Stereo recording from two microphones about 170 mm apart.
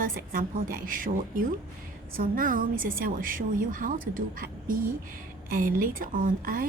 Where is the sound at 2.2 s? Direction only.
55° right (ahead or behind).